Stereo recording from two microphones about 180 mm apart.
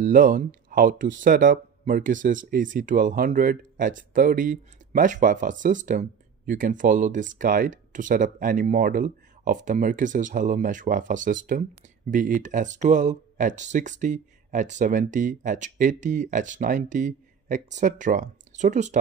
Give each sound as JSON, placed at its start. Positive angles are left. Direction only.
{"t": 0.0, "sound": "speech", "side_deg": -45}